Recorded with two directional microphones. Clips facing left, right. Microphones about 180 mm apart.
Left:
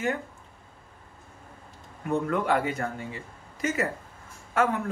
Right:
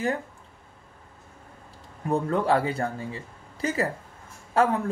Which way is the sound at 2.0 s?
30° right (ahead or behind).